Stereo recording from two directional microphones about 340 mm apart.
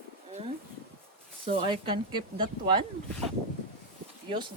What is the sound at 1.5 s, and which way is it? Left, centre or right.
Speech, centre.